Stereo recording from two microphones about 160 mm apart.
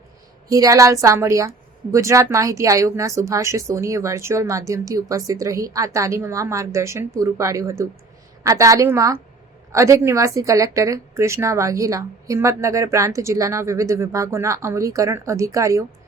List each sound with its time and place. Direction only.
0.4 s a woman's voice: 20° right (ahead or behind)